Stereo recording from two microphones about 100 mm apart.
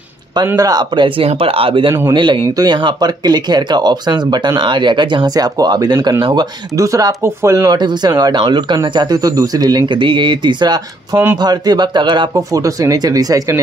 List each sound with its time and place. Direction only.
0.6 s speech: 40° right (ahead or behind)
1.2 s speech: 70° right (ahead or behind); by 7.7 s 35° right (ahead or behind)
7.7 s speech: 45° right (ahead or behind)
12.4 s speech: 35° right (ahead or behind)